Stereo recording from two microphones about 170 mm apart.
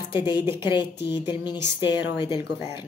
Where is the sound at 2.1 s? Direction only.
30° left (ahead or behind).